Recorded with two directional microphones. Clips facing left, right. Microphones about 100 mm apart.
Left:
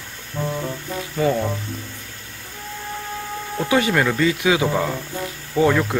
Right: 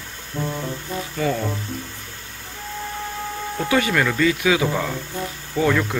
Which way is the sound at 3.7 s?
25° left (ahead or behind).